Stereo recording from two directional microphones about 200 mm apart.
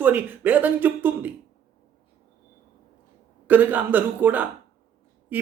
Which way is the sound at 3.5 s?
10° right (ahead or behind).